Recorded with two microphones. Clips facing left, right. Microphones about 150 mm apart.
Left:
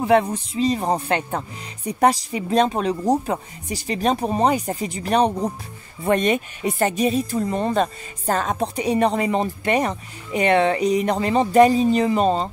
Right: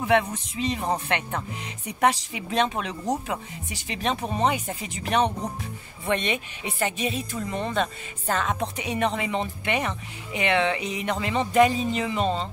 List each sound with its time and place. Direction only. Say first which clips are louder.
0.0 s speech: left 5 dB; 35° left (ahead or behind)